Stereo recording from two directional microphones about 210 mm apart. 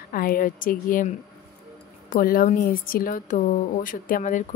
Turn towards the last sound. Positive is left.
turn(degrees=40)  # may be behind; listen again after turning